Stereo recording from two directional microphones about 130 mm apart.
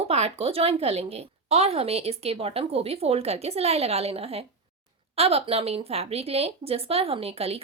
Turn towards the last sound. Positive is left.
turn(degrees=-50)  # may be behind; listen again after turning